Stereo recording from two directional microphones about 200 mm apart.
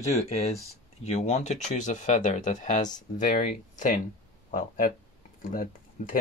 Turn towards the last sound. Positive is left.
turn(degrees=40)  # may be behind; listen again after turning